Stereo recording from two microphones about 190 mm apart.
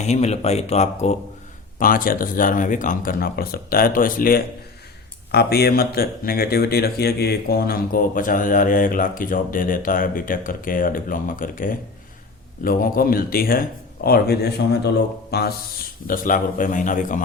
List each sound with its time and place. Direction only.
0.0 s speech: 35° left (ahead or behind)
1.8 s speech: 45° left (ahead or behind)
16.0 s speech: 45° left (ahead or behind)